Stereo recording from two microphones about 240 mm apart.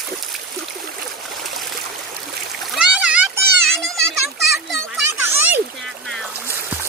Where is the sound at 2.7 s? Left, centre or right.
Centre.